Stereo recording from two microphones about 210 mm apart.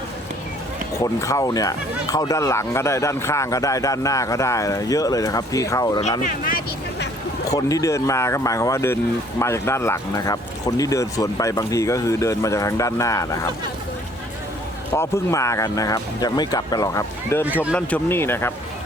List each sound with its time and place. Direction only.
0.9 s speech: 15° left (ahead or behind)
7.5 s speech: 15° left (ahead or behind)
14.9 s speech: 15° left (ahead or behind)